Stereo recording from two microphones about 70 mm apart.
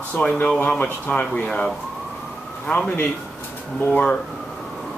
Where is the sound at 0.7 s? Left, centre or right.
Left.